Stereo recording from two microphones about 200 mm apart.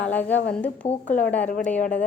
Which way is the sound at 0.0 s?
10° left (ahead or behind).